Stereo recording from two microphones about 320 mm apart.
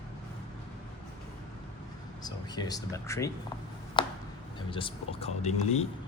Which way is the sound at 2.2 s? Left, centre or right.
Centre.